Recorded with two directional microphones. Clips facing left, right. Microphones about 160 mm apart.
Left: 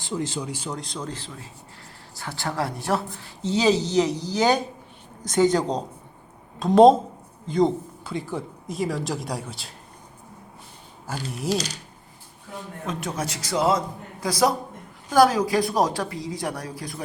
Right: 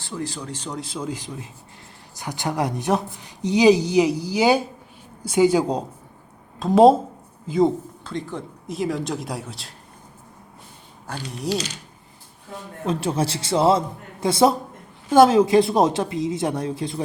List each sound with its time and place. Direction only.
0.0 s speech: 20° left (ahead or behind)
0.4 s speech: 10° left (ahead or behind)
0.8 s speech: 5° right (ahead or behind)
8.0 s speech: 5° left (ahead or behind)
11.0 s speech: 5° left (ahead or behind)
12.8 s speech: 30° right (ahead or behind)